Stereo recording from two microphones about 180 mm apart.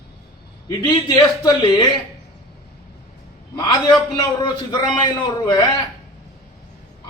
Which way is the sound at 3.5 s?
25° left (ahead or behind).